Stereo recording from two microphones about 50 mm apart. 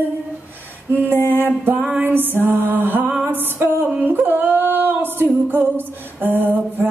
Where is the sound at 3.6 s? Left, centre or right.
Right.